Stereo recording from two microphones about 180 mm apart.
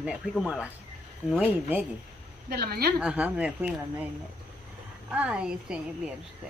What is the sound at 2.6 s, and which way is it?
Speech, 60° right (ahead or behind).